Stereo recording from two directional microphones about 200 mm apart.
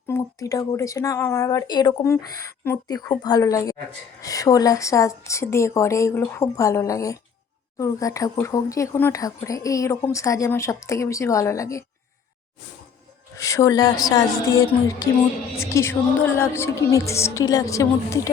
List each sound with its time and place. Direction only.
0.1 s speech: 15° left (ahead or behind)
13.3 s speech: 15° left (ahead or behind)